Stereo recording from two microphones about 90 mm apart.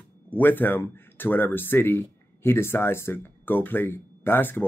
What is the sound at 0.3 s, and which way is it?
Speech, 20° left (ahead or behind).